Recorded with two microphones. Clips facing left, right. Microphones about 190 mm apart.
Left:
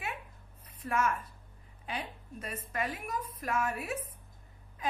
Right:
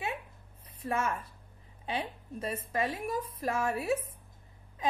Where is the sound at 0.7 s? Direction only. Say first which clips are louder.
Left 1 dB; 25° right (ahead or behind).